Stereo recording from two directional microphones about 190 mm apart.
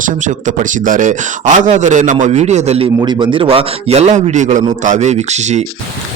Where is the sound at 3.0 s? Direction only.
25° right (ahead or behind).